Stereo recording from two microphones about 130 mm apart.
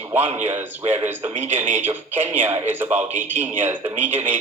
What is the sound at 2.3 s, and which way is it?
Speech, 15° right (ahead or behind).